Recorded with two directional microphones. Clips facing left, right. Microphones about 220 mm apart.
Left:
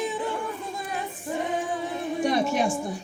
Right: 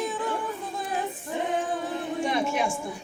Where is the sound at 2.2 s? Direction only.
40° left (ahead or behind).